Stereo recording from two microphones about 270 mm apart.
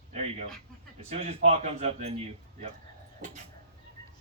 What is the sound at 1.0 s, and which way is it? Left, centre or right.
A man's voice, right.